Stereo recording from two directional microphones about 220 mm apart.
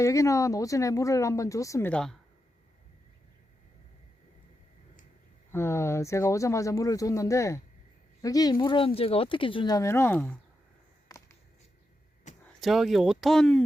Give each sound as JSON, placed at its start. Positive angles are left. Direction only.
{"t": 0.0, "sound": "speech", "side_deg": 15}
{"t": 5.5, "sound": "speech", "side_deg": 10}
{"t": 11.1, "sound": "a sound", "side_deg": 15}
{"t": 12.4, "sound": "speech", "side_deg": 0}